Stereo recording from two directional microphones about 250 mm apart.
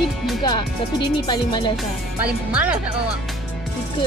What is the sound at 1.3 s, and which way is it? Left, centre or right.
Speech, centre.